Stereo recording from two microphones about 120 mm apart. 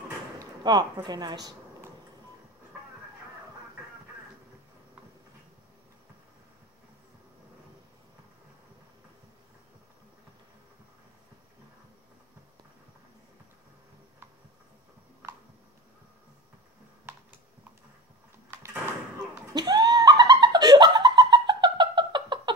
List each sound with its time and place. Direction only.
0.4 s speech: 35° right (ahead or behind)
19.5 s laughter: 35° right (ahead or behind)